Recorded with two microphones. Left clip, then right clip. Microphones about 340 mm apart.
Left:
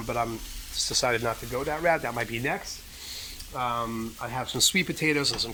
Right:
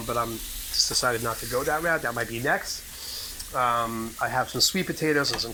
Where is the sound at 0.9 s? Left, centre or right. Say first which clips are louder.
Even; centre.